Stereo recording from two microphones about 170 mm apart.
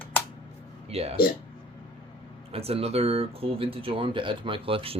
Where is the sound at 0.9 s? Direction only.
35° right (ahead or behind).